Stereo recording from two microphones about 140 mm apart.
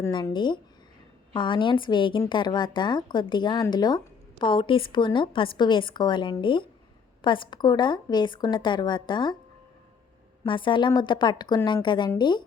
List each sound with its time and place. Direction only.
0.3 s a woman's voice: 35° left (ahead or behind)
10.4 s a woman's voice: 35° left (ahead or behind)